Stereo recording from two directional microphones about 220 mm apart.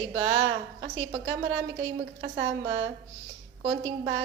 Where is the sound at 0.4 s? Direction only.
55° right (ahead or behind).